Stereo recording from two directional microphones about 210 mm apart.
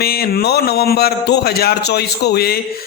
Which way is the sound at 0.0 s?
45° left (ahead or behind).